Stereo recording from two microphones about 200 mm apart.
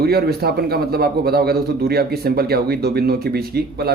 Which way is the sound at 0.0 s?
50° right (ahead or behind).